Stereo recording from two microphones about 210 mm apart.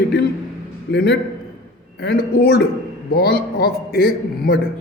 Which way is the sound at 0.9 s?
50° left (ahead or behind).